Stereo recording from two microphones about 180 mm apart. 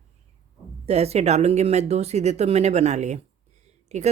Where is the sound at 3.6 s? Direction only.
40° right (ahead or behind).